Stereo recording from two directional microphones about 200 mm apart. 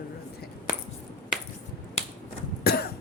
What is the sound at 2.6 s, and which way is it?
Cough, 50° left (ahead or behind).